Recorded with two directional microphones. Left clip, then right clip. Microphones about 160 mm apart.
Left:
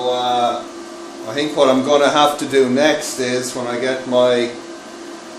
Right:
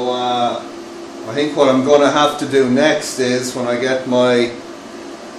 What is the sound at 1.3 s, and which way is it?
A man's voice, 45° left (ahead or behind).